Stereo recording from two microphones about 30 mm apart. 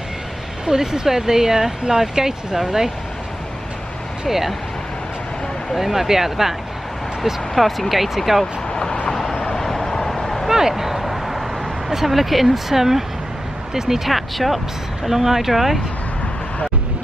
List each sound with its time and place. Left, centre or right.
0.7 s speech: right
5.8 s speech: centre
7.5 s speech: centre
10.1 s vehicle: centre
10.7 s a sound: centre
11.9 s speech: centre